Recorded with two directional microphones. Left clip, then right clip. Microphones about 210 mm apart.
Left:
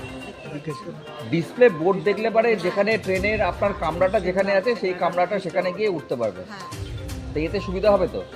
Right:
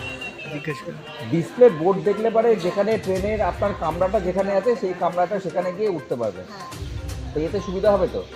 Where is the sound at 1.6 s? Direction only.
15° right (ahead or behind).